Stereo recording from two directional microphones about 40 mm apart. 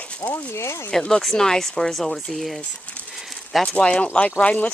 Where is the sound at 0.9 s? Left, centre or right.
Centre.